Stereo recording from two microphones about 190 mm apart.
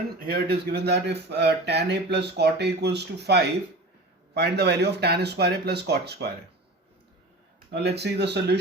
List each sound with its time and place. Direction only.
0.3 s speech: 55° right (ahead or behind)
7.7 s speech: 60° right (ahead or behind)